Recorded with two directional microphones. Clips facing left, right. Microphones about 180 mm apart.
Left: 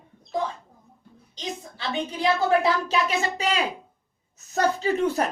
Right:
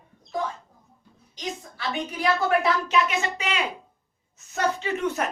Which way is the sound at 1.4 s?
25° left (ahead or behind).